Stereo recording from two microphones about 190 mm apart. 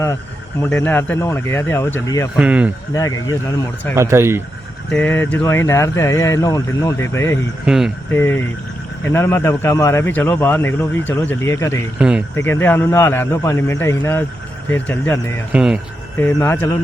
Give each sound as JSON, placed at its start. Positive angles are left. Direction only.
{"t": 0.6, "sound": "a man's voice", "side_deg": 10}
{"t": 2.3, "sound": "speech", "side_deg": -5}
{"t": 2.9, "sound": "a man's voice", "side_deg": 15}
{"t": 3.9, "sound": "speech", "side_deg": -15}
{"t": 4.9, "sound": "a man's voice", "side_deg": 5}
{"t": 7.6, "sound": "speech", "side_deg": 0}
{"t": 8.1, "sound": "a man's voice", "side_deg": 10}
{"t": 11.9, "sound": "speech", "side_deg": -5}
{"t": 12.4, "sound": "a man's voice", "side_deg": 10}
{"t": 15.5, "sound": "speech", "side_deg": -5}
{"t": 16.1, "sound": "a man's voice", "side_deg": 10}